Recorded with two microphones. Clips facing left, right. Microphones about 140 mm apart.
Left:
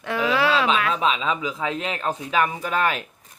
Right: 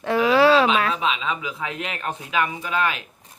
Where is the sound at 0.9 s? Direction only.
40° left (ahead or behind).